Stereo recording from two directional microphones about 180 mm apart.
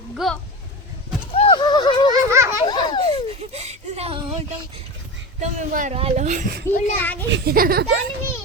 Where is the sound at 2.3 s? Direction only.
15° right (ahead or behind).